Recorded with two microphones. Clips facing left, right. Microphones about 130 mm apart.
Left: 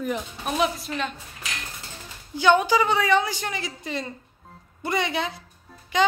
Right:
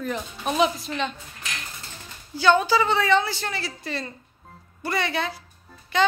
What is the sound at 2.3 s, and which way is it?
Speech, 15° left (ahead or behind).